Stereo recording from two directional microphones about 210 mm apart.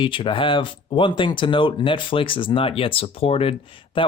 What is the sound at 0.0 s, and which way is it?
Speech, 25° left (ahead or behind).